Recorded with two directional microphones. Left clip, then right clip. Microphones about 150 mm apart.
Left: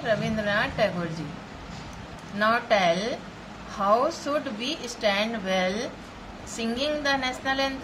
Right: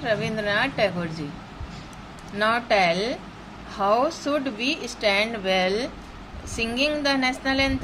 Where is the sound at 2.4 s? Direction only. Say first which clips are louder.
Right 1 dB; 45° right (ahead or behind).